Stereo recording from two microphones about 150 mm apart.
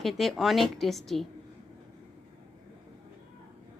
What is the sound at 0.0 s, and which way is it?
A woman's voice, centre (ahead or behind).